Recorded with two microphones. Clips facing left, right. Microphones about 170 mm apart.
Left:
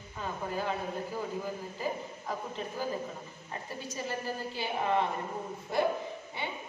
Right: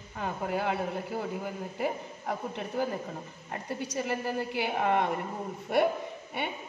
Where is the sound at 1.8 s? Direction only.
65° right (ahead or behind).